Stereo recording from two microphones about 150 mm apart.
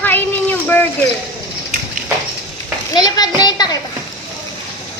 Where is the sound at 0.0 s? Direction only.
10° left (ahead or behind).